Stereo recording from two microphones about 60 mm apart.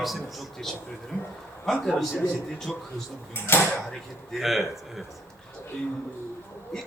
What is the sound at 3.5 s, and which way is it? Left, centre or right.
Speech, left.